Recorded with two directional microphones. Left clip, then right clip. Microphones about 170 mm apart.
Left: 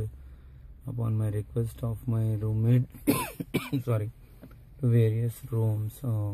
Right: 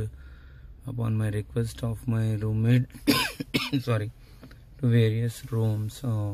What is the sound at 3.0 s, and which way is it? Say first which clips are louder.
Speech: right 6 dB; 15° left (ahead or behind).